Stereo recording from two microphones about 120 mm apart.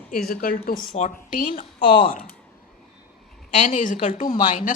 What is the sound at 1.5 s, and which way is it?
Speech, 45° left (ahead or behind).